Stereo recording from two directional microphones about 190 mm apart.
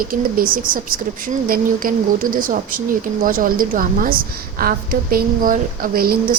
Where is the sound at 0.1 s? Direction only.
50° right (ahead or behind).